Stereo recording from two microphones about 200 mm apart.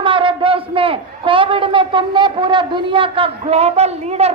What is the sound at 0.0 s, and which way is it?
A man's voice, 25° right (ahead or behind).